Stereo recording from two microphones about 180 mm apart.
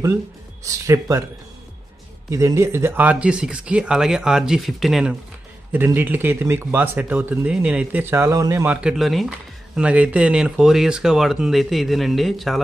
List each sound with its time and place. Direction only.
0.7 s speech: 20° right (ahead or behind)
2.3 s speech: 15° right (ahead or behind)
8.8 s speech: centre (ahead or behind)